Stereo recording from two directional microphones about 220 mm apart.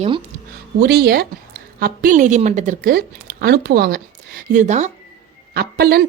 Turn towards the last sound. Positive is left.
turn(degrees=-45)  # may be behind; listen again after turning